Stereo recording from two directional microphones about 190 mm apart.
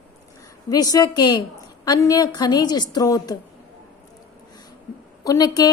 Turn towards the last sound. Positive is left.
turn(degrees=20)  # may be behind; listen again after turning